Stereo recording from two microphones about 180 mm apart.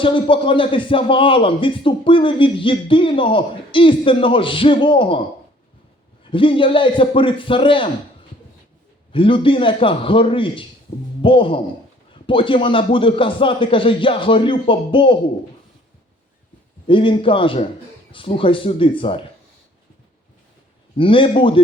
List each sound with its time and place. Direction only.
0.0 s speech: 30° left (ahead or behind)
6.3 s speech: 30° left (ahead or behind)
9.1 s speech: 30° left (ahead or behind)
16.8 s speech: 30° left (ahead or behind)
20.9 s speech: 30° left (ahead or behind)